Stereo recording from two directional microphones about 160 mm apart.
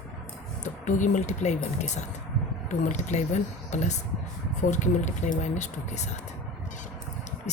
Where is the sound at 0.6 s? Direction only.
50° left (ahead or behind).